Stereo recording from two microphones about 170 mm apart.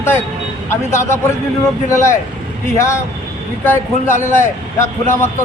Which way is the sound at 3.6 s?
15° left (ahead or behind).